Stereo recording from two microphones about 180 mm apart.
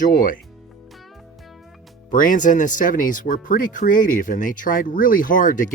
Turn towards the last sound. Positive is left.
turn(degrees=50)  # may be behind; listen again after turning